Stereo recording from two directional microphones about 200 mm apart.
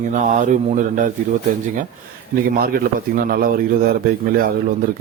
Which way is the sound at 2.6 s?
45° right (ahead or behind).